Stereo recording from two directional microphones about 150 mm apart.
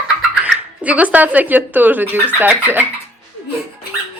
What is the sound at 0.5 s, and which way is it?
Speech, 10° right (ahead or behind).